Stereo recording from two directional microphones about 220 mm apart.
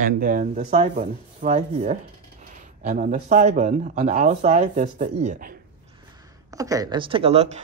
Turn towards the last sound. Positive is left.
turn(degrees=-30)  # may be behind; listen again after turning